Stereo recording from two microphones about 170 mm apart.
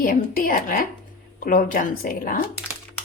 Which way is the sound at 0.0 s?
55° left (ahead or behind).